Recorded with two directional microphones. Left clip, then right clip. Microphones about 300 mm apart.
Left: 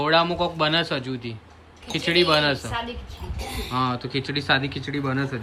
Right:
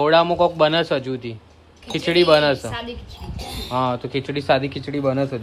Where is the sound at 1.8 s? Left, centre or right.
Centre.